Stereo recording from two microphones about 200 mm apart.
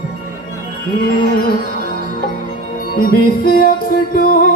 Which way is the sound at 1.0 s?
45° left (ahead or behind).